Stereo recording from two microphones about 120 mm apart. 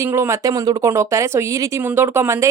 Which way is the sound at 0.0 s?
20° right (ahead or behind).